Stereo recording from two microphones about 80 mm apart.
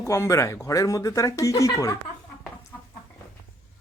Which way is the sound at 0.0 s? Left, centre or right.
Left.